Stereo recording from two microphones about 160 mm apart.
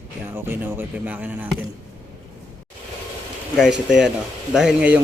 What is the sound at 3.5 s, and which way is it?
A man's voice, 5° right (ahead or behind).